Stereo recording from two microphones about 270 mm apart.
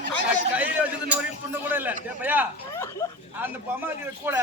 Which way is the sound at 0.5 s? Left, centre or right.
Centre.